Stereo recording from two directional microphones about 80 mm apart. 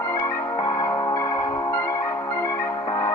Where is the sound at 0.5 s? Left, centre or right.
Left.